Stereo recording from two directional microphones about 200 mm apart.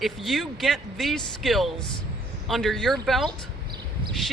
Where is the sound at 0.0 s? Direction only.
Centre (ahead or behind).